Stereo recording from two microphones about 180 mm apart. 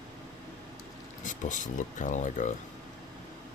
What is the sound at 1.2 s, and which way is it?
Speech, 45° left (ahead or behind).